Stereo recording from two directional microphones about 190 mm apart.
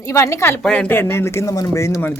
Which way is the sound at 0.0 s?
15° left (ahead or behind).